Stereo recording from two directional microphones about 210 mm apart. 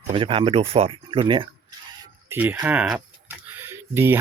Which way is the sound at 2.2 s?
10° right (ahead or behind).